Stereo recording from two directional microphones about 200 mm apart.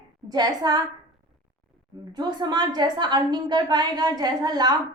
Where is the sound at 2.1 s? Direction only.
20° right (ahead or behind).